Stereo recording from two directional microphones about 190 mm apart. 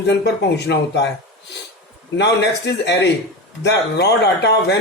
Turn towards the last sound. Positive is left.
turn(degrees=60)  # may be behind; listen again after turning